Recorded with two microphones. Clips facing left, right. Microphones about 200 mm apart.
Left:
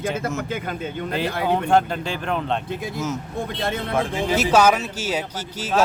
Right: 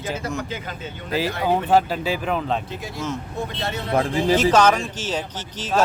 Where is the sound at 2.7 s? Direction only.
55° left (ahead or behind).